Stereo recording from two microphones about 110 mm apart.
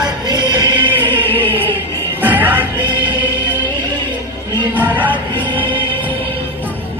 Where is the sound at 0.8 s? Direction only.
50° right (ahead or behind).